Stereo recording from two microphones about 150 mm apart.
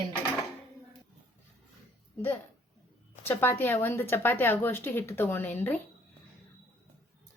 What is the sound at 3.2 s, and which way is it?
A woman's voice, 15° left (ahead or behind).